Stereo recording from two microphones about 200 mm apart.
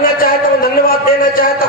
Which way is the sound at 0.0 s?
45° left (ahead or behind).